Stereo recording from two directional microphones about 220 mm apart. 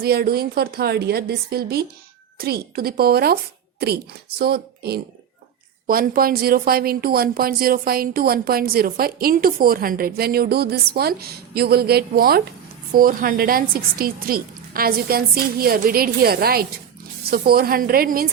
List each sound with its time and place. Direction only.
0.0 s speech: 45° right (ahead or behind)